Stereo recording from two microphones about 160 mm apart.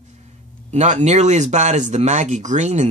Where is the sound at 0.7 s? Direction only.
45° right (ahead or behind).